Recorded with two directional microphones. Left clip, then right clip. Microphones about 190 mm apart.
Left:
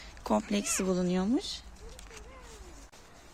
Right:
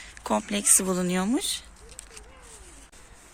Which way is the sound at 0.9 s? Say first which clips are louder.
Right 3 dB; 15° right (ahead or behind).